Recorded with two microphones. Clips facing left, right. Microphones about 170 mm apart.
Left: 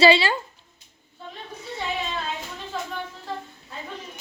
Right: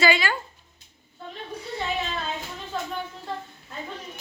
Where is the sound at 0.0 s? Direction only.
30° left (ahead or behind).